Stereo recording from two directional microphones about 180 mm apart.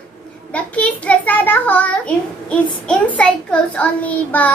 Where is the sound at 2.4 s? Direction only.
5° left (ahead or behind).